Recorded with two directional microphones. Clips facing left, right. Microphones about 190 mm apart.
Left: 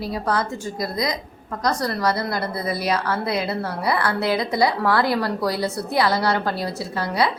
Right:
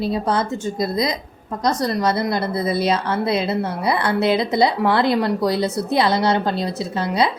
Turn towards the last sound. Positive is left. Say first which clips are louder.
# right 2 dB
turn(degrees=-20)  # may be behind; listen again after turning